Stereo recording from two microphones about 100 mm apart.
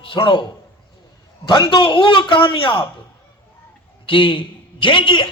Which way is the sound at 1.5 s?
45° left (ahead or behind).